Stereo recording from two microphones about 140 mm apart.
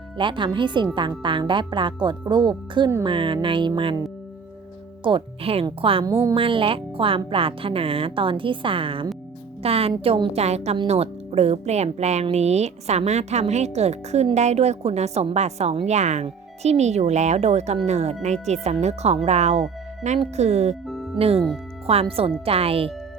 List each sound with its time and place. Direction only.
0.2 s speech: 35° right (ahead or behind)
5.0 s a woman's voice: 40° right (ahead or behind)
20.8 s music: centre (ahead or behind)
21.2 s speech: 45° right (ahead or behind)